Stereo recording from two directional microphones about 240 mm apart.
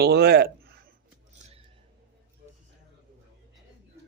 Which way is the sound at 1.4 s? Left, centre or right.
Right.